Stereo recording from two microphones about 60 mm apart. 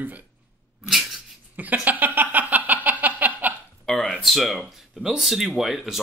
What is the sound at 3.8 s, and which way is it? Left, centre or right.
Speech, centre.